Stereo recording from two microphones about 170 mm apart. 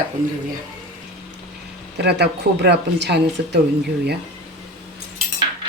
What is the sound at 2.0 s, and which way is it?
Speech, 80° right.